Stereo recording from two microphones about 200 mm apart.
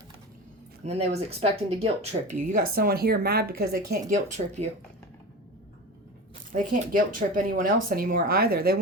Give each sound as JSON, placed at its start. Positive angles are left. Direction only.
{"t": 0.9, "sound": "speech", "side_deg": -30}
{"t": 4.1, "sound": "speech", "side_deg": -35}
{"t": 6.5, "sound": "speech", "side_deg": -40}